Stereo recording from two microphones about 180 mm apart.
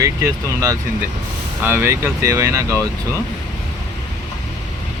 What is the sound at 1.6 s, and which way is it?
Speech, 10° right (ahead or behind).